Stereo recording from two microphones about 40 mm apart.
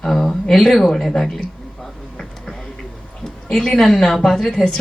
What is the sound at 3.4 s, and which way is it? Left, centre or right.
Speech, centre.